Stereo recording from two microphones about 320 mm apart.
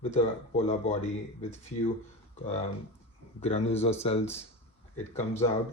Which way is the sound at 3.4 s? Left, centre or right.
Centre.